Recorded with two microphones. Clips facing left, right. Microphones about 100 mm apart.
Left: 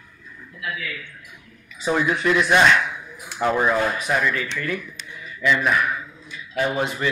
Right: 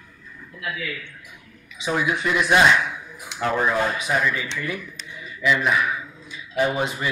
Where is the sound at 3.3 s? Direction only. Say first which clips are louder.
Left 2 dB; 10° left (ahead or behind).